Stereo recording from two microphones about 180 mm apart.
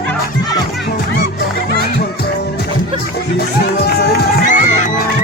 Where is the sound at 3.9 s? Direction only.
60° left (ahead or behind).